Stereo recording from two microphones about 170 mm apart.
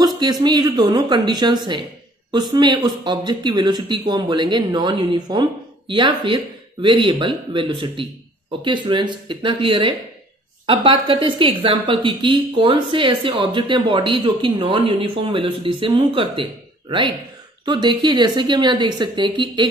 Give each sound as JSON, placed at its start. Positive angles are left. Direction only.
{"t": 0.0, "sound": "speech", "side_deg": -25}
{"t": 17.6, "sound": "speech", "side_deg": -25}